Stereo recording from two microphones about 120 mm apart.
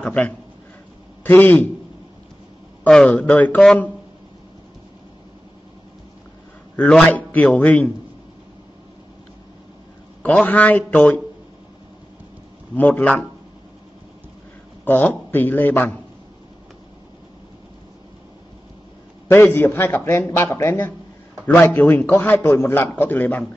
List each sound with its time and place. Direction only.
0.0 s a man's voice: 10° left (ahead or behind)
2.9 s a man's voice: 10° left (ahead or behind)
7.1 s a man's voice: 15° left (ahead or behind)
10.2 s a man's voice: 15° left (ahead or behind)
12.7 s a man's voice: 15° left (ahead or behind)
14.9 s a man's voice: 15° left (ahead or behind)
19.2 s a man's voice: 15° left (ahead or behind)